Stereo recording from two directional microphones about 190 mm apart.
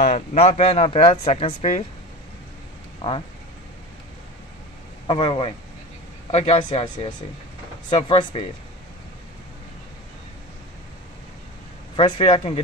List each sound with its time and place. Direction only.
0.0 s speech: 35° left (ahead or behind)
3.0 s speech: 25° left (ahead or behind)
5.0 s speech: 25° left (ahead or behind)
12.0 s speech: 25° left (ahead or behind)